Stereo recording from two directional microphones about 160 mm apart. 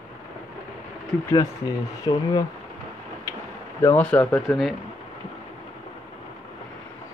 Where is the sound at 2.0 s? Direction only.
25° left (ahead or behind).